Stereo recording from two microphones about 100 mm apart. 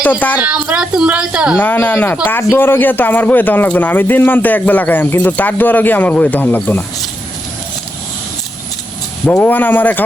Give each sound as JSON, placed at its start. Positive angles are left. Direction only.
{"t": 0.0, "sound": "a man's voice", "side_deg": 15}
{"t": 0.4, "sound": "a child's voice", "side_deg": -10}
{"t": 1.6, "sound": "a man's voice", "side_deg": 15}
{"t": 9.4, "sound": "a man's voice", "side_deg": 20}